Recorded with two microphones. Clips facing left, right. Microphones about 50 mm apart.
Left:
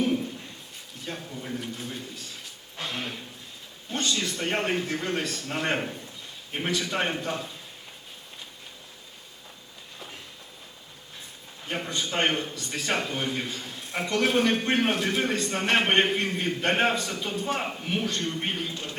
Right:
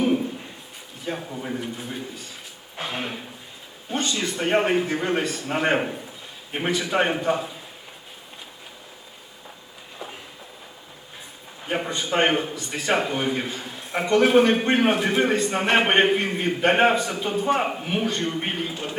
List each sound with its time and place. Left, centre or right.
0.0 s a sound: centre
1.3 s a man's voice: right
1.5 s a man's voice: centre
11.6 s a man's voice: centre